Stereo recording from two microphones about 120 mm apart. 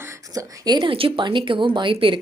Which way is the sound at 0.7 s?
40° right (ahead or behind).